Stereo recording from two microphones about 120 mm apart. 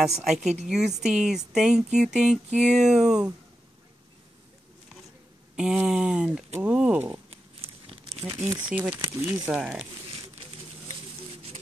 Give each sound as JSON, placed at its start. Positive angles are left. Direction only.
{"t": 0.2, "sound": "speech", "side_deg": -5}
{"t": 5.6, "sound": "speech", "side_deg": -5}
{"t": 7.8, "sound": "crumpling", "side_deg": -55}
{"t": 8.5, "sound": "speech", "side_deg": -10}
{"t": 9.6, "sound": "speech", "side_deg": -5}